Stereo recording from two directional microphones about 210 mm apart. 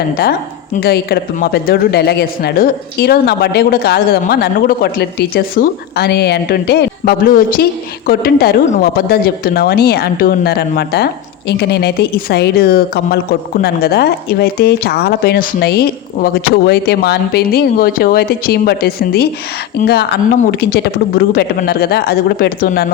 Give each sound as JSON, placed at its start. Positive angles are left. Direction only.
{"t": 0.8, "sound": "speech", "side_deg": 50}